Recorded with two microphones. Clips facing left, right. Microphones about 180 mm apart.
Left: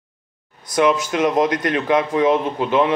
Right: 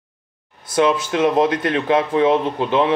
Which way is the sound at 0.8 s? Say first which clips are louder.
Even; 30° right (ahead or behind).